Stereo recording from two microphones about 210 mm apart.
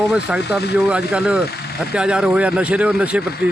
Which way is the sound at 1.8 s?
5° right (ahead or behind).